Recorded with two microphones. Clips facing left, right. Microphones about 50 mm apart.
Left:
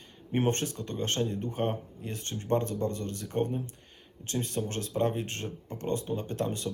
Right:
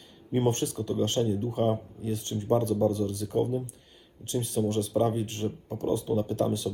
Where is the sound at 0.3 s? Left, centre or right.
Left.